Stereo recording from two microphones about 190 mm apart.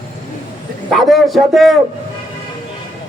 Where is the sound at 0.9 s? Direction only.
Centre (ahead or behind).